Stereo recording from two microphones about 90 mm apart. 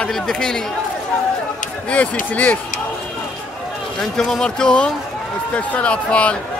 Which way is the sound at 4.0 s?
5° left (ahead or behind).